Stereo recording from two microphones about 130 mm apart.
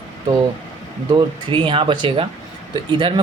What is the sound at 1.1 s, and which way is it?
Speech, 40° right (ahead or behind).